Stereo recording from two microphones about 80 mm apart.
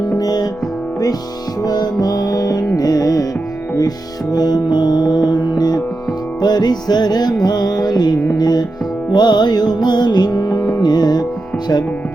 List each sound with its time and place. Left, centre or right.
0.1 s music: left
1.6 s music: left